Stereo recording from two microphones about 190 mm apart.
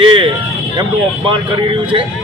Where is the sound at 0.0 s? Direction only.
25° right (ahead or behind).